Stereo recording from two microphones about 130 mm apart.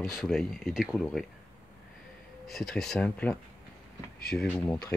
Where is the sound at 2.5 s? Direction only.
Centre (ahead or behind).